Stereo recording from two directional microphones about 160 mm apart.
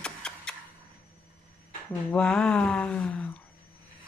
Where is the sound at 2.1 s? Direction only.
5° left (ahead or behind).